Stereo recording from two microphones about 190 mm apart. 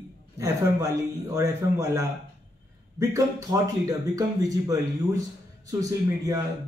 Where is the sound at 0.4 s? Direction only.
15° right (ahead or behind).